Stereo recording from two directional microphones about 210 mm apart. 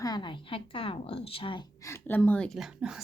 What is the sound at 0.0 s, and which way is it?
A woman's voice, 20° left (ahead or behind).